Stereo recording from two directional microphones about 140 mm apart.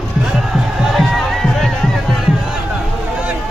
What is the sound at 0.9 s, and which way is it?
Music, centre (ahead or behind).